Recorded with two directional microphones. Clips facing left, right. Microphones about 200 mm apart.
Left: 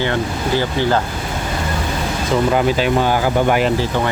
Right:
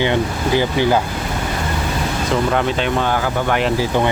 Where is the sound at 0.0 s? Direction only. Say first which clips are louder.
Right 2 dB; 15° right (ahead or behind).